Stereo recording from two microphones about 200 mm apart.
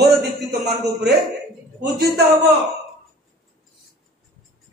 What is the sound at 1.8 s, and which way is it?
Speech, 50° right (ahead or behind).